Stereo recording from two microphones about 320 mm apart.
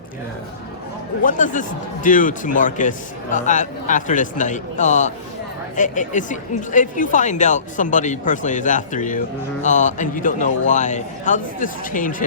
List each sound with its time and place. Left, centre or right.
1.2 s speech: left